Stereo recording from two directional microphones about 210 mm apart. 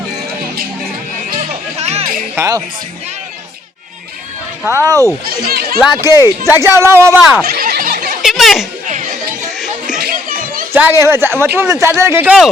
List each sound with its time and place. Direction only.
1.8 s music: 30° right (ahead or behind)
2.3 s speech: 15° right (ahead or behind)
4.6 s speech: 15° right (ahead or behind)
5.2 s speech: 45° right (ahead or behind)
6.1 s speech: 15° right (ahead or behind)
7.4 s a sound: 45° right (ahead or behind)
8.2 s chatter: centre (ahead or behind)
8.9 s music: 35° right (ahead or behind)
10.0 s children playing: 45° right (ahead or behind)
10.7 s speech: 10° right (ahead or behind)